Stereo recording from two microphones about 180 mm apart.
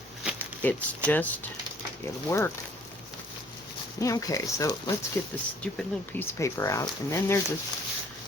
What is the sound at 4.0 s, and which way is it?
Speech, 20° left (ahead or behind).